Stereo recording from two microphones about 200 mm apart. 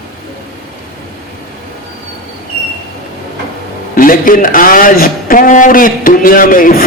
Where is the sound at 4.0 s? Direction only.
45° left (ahead or behind).